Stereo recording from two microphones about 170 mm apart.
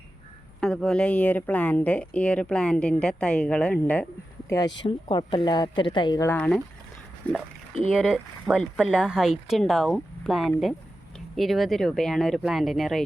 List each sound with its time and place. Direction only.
0.6 s speech: 5° left (ahead or behind)
4.4 s a woman's voice: 20° left (ahead or behind)
6.3 s speech: 10° left (ahead or behind)